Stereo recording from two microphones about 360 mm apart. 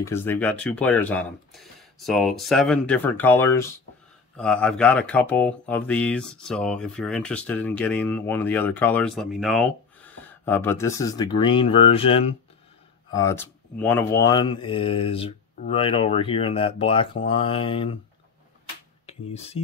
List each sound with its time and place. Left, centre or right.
0.0 s speech: centre
19.0 s speech: centre